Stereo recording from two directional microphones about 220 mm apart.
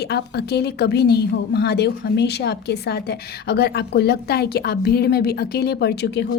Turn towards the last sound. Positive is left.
turn(degrees=50)  # may be behind; listen again after turning